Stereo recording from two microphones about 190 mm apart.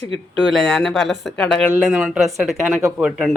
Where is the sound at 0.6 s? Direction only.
5° left (ahead or behind).